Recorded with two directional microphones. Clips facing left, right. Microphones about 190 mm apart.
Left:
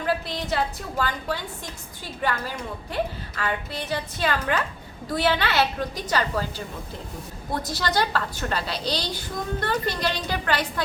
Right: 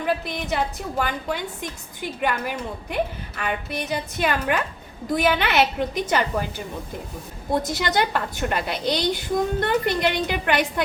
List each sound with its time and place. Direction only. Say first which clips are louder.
0.0 s a woman's voice: right 1 dB; 15° right (ahead or behind)
7.5 s a woman's voice: right 3 dB; 20° right (ahead or behind)